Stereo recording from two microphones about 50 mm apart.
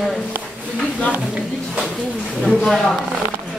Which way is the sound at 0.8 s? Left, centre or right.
Left.